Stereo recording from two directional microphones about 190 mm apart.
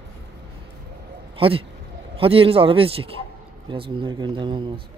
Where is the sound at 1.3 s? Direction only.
30° right (ahead or behind).